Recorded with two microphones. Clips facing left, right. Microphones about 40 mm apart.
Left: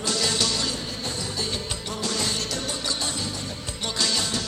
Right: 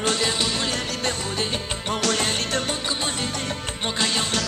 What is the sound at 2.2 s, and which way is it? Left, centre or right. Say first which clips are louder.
Music: right 4 dB; right.